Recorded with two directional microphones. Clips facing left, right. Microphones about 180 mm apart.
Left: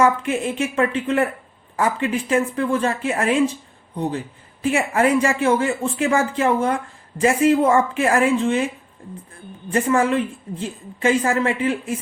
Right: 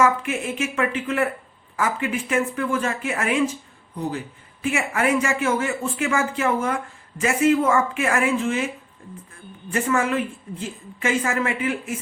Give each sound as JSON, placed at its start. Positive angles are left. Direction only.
{"t": 0.0, "sound": "a woman's voice", "side_deg": 30}
{"t": 4.6, "sound": "a woman's voice", "side_deg": 35}
{"t": 9.6, "sound": "a woman's voice", "side_deg": 35}